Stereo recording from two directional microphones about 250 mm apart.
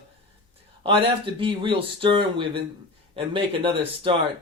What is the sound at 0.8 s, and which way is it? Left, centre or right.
Speech, right.